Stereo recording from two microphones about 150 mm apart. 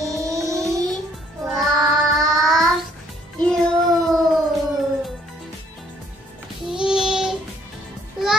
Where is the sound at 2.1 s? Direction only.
Centre (ahead or behind).